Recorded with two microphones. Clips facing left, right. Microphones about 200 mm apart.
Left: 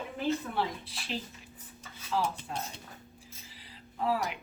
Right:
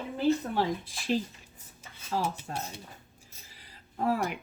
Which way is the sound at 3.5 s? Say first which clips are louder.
Left 4 dB; 45° right (ahead or behind).